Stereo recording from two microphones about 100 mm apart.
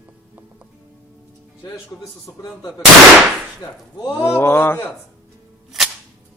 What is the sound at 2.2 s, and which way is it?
Speech, 40° left (ahead or behind).